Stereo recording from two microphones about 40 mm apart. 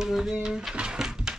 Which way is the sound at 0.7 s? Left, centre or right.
Right.